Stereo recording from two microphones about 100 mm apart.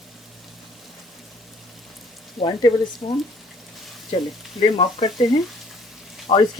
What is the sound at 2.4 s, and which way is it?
Speech, 65° left (ahead or behind).